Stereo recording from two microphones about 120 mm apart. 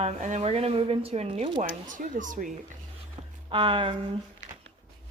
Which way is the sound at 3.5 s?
45° right (ahead or behind).